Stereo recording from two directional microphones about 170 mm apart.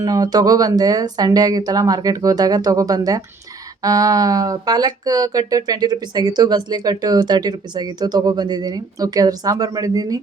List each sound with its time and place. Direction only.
0.0 s speech: 20° right (ahead or behind)